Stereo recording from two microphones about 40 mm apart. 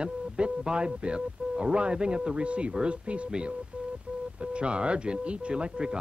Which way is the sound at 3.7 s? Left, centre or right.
Right.